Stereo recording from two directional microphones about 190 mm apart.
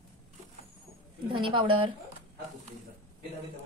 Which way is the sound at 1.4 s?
25° right (ahead or behind).